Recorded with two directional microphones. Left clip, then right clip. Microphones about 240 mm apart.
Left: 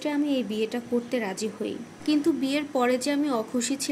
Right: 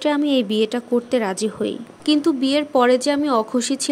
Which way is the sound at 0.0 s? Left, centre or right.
Right.